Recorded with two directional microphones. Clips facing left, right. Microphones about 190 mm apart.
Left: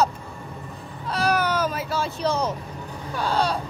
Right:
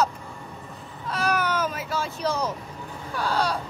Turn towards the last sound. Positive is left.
turn(degrees=25)  # may be behind; listen again after turning